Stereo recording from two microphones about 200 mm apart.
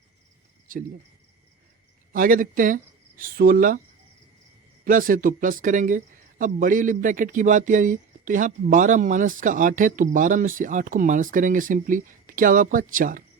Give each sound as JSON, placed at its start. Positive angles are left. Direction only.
{"t": 2.1, "sound": "speech", "side_deg": -45}
{"t": 4.9, "sound": "a man's voice", "side_deg": -45}